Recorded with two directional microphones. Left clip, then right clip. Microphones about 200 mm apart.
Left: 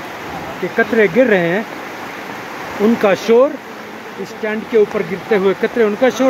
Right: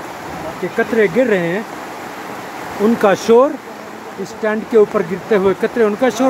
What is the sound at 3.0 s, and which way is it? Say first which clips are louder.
Speech: right 1 dB; 15° right (ahead or behind).